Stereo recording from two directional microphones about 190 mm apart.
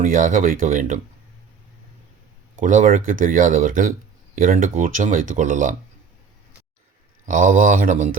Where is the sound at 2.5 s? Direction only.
40° right (ahead or behind).